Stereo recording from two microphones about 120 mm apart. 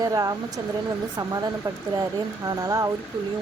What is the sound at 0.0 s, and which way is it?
Speech, 30° right (ahead or behind).